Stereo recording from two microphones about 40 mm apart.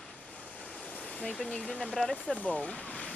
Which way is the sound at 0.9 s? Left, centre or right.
Left.